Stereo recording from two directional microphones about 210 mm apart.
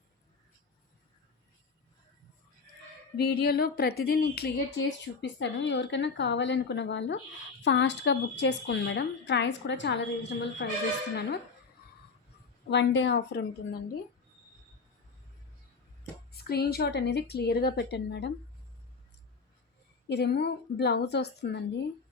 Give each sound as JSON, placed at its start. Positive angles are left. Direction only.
{"t": 3.2, "sound": "a woman's voice", "side_deg": 50}
{"t": 12.7, "sound": "a woman's voice", "side_deg": 60}
{"t": 16.3, "sound": "a woman's voice", "side_deg": 50}
{"t": 20.1, "sound": "a woman's voice", "side_deg": 55}